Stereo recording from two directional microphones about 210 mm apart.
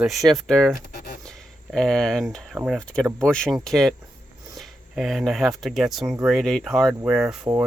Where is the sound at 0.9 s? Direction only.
45° left (ahead or behind).